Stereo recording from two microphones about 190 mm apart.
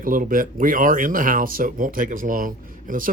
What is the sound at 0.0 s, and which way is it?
Speech, 45° right (ahead or behind).